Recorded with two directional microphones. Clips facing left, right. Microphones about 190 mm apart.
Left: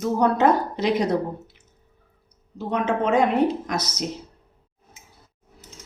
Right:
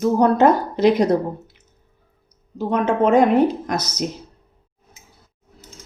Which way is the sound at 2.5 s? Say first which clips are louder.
Right 5 dB; 45° right (ahead or behind).